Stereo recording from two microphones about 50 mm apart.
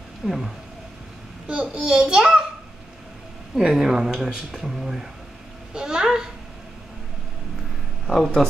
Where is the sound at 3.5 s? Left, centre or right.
Centre.